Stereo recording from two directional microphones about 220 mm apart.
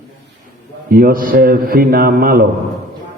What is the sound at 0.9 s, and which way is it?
A man's voice, 40° right (ahead or behind).